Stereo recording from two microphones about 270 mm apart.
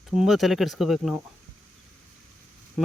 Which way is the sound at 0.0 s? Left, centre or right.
Centre.